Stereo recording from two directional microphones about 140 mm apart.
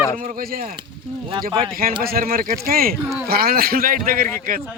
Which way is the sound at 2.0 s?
90° right.